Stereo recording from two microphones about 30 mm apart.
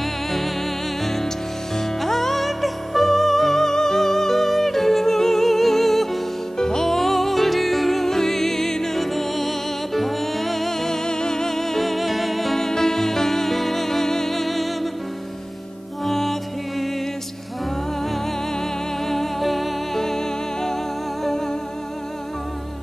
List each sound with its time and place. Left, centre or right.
0.0 s music: centre
6.6 s music: centre
7.0 s music: centre
11.1 s music: left
11.5 s music: centre
12.5 s music: centre
16.0 s music: centre
19.0 s music: centre
20.0 s music: centre